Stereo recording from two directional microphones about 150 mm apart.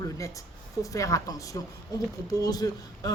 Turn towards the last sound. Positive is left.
turn(degrees=25)  # may be behind; listen again after turning